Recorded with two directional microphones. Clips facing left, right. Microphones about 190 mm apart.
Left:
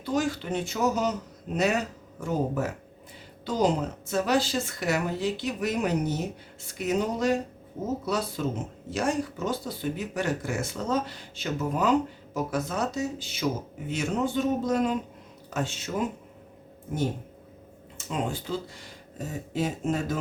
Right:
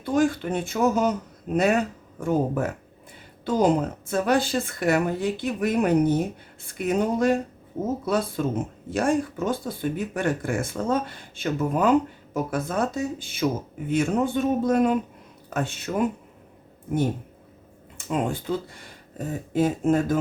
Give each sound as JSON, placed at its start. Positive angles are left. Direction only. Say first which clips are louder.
{"t": 0.0, "sound": "speech", "louder": "right 5 dB", "side_deg": -55}
{"t": 17.9, "sound": "speech", "louder": "right 5 dB", "side_deg": -55}
{"t": 19.2, "sound": "a sound", "louder": "right 5 dB", "side_deg": -55}
{"t": 19.5, "sound": "speech", "louder": "right 7 dB", "side_deg": -50}